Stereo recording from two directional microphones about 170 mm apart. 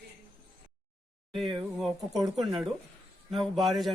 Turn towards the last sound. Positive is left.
turn(degrees=0)  # may be behind; listen again after turning